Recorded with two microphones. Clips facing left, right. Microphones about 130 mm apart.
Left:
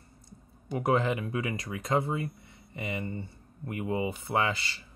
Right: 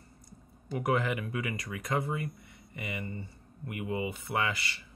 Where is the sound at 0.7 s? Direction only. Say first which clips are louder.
Left 3 dB; 25° left (ahead or behind).